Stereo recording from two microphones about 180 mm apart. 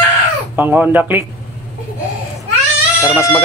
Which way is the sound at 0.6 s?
10° right (ahead or behind).